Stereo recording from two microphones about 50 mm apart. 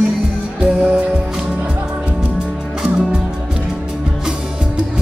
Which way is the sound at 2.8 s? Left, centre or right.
Centre.